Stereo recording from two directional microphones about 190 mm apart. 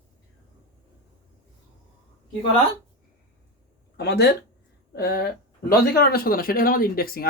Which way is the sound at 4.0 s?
60° left (ahead or behind).